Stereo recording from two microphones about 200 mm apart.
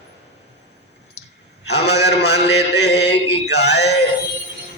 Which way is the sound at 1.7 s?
55° left (ahead or behind).